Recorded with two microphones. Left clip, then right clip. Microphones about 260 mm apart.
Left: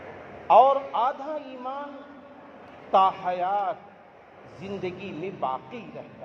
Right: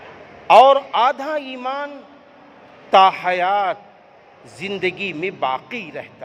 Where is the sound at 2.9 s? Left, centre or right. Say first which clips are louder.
Right 8 dB; right.